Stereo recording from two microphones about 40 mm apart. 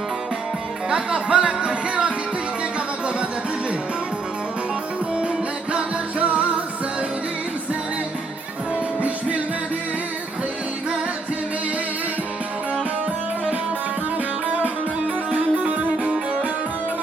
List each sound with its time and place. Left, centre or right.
0.9 s music: centre
5.7 s music: right
9.0 s music: right
14.4 s music: right